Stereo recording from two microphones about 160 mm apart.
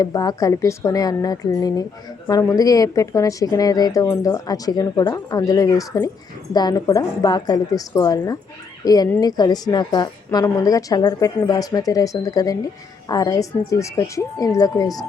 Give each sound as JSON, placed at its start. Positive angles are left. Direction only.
{"t": 0.0, "sound": "a woman's voice", "side_deg": 25}